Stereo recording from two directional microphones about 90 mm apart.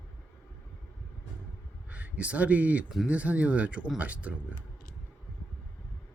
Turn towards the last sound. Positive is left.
turn(degrees=-15)  # may be behind; listen again after turning